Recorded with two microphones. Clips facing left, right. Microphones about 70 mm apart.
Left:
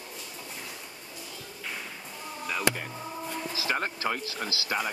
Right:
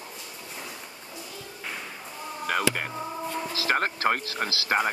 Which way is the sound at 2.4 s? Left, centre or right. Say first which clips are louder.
Right 3 dB; right.